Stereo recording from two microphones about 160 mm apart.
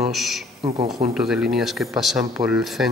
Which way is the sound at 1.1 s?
5° right (ahead or behind).